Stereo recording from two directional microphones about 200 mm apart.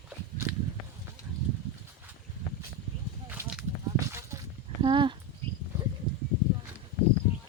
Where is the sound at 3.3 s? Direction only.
10° right (ahead or behind).